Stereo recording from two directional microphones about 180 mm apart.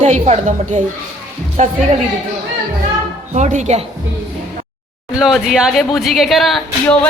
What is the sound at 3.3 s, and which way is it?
Speech, 40° right (ahead or behind).